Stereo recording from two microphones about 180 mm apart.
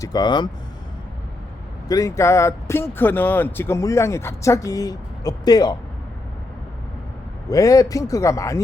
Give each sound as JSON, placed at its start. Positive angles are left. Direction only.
{"t": 0.0, "sound": "speech", "side_deg": 25}
{"t": 1.9, "sound": "speech", "side_deg": 20}
{"t": 7.5, "sound": "speech", "side_deg": 20}